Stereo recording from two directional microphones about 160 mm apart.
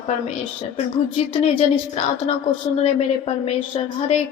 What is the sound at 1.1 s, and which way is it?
Speech, 40° left (ahead or behind).